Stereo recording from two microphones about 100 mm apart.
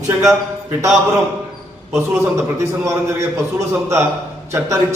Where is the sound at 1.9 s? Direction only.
20° right (ahead or behind).